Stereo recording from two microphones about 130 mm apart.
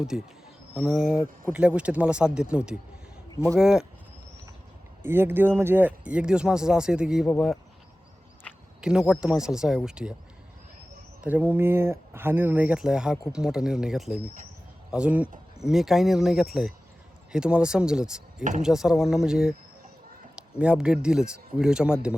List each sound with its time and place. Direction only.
0.1 s speech: 5° right (ahead or behind)
5.0 s speech: 15° right (ahead or behind); by 7.6 s centre (ahead or behind)
8.5 s a sound: 10° left (ahead or behind)
8.8 s speech: 5° right (ahead or behind)
11.2 s speech: 10° right (ahead or behind)
20.6 s speech: 10° right (ahead or behind)